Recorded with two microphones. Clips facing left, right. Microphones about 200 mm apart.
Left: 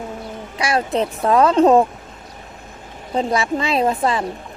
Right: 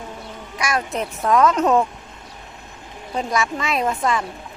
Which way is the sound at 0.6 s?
30° left (ahead or behind).